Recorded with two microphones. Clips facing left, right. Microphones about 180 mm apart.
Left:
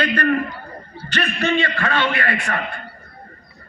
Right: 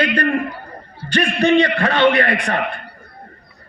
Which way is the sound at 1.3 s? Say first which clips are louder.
Right 7 dB; 15° right (ahead or behind).